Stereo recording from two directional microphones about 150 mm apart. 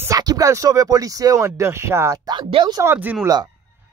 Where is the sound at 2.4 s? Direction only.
35° right (ahead or behind).